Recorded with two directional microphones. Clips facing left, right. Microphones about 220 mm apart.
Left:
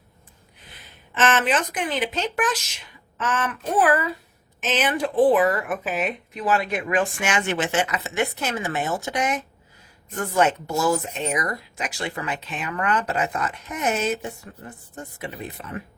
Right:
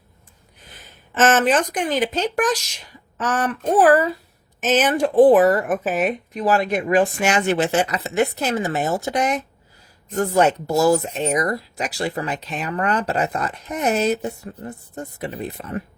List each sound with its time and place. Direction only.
1.1 s speech: 45° right (ahead or behind)